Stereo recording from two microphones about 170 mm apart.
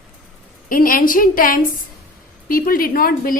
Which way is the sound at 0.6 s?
55° left (ahead or behind).